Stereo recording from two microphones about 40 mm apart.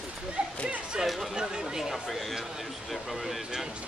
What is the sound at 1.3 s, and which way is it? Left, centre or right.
Speech, centre.